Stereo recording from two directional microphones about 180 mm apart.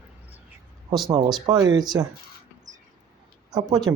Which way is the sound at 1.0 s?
20° right (ahead or behind).